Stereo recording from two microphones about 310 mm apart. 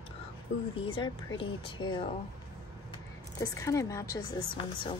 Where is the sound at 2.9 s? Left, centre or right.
Centre.